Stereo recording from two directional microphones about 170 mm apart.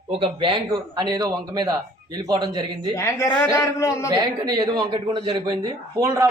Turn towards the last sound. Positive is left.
turn(degrees=-20)  # may be behind; listen again after turning